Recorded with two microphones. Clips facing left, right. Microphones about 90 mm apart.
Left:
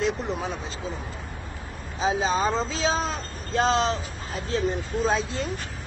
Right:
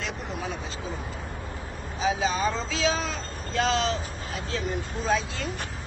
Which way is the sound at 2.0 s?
35° left (ahead or behind).